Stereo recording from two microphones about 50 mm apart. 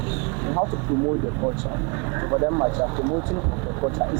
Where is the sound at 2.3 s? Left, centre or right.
Right.